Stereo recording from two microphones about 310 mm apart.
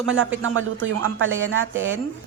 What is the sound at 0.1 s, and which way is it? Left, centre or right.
Speech, right.